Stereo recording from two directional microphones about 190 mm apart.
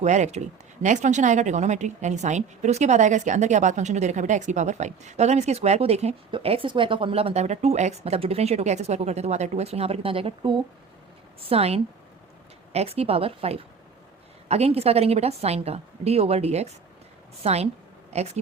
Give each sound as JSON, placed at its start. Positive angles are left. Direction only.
{"t": 0.0, "sound": "a woman's voice", "side_deg": -35}